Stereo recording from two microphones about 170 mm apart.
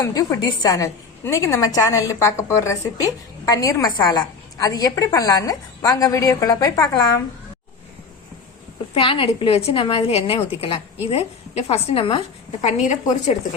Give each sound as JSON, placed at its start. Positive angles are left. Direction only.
{"t": 0.0, "sound": "a woman's voice", "side_deg": 20}
{"t": 9.0, "sound": "a woman's voice", "side_deg": 30}
{"t": 12.6, "sound": "a woman's voice", "side_deg": 45}